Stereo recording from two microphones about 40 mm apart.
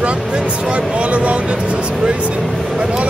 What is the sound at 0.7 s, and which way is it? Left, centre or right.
Speech, right.